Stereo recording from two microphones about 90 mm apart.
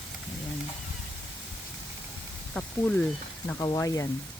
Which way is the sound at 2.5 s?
10° left (ahead or behind).